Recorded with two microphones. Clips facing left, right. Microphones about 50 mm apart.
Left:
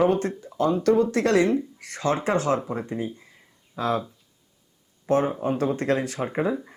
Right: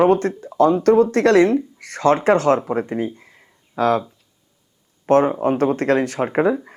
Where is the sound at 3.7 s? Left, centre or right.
Right.